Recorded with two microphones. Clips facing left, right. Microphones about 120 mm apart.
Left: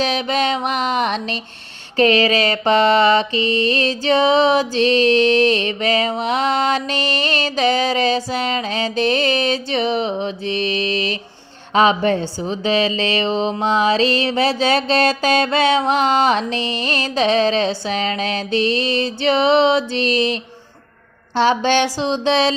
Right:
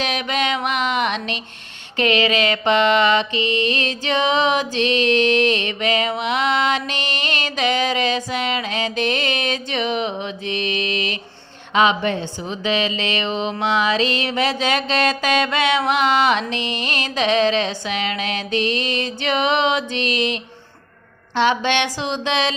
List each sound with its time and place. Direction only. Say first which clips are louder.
0.0 s mantra: left 3 dB; 30° left (ahead or behind)
11.7 s music: left 3 dB; 35° left (ahead or behind)